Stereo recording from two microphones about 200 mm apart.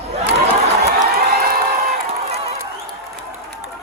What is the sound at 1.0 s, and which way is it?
Crowd, 50° right (ahead or behind).